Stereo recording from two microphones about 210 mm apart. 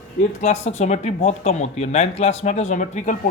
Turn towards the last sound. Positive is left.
turn(degrees=35)  # may be behind; listen again after turning